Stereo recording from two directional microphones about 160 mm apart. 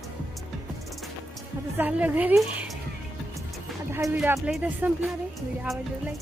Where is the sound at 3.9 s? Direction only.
20° right (ahead or behind).